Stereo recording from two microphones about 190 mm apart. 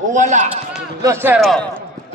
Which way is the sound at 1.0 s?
15° right (ahead or behind).